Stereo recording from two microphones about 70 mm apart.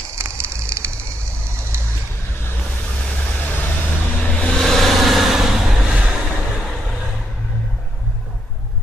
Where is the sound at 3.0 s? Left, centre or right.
Left.